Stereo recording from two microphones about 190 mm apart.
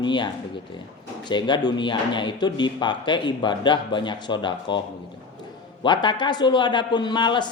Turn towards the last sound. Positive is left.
turn(degrees=25)  # may be behind; listen again after turning